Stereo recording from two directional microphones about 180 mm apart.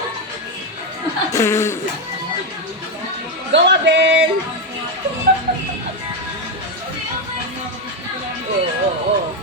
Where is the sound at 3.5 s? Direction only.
80° right.